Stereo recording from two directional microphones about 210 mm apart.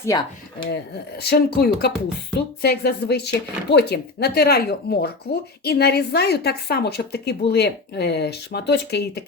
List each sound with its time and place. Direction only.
0.0 s speech: 20° left (ahead or behind)
1.2 s speech: 50° left (ahead or behind)